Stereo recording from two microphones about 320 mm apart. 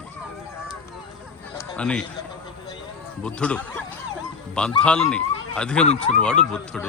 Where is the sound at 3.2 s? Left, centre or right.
Centre.